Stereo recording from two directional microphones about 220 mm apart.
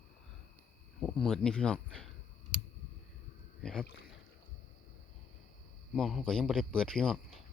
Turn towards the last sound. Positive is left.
turn(degrees=0)  # may be behind; listen again after turning